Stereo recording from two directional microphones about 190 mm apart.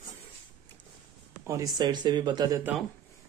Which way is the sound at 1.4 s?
15° right (ahead or behind).